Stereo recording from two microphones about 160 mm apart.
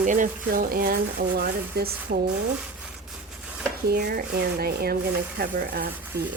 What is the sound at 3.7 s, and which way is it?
A woman's voice, 75° right (ahead or behind).